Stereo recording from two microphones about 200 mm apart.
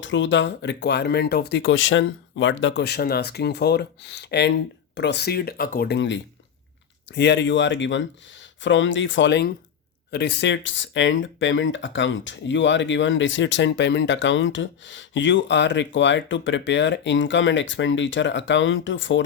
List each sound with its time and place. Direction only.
0.0 s speech: 65° left (ahead or behind)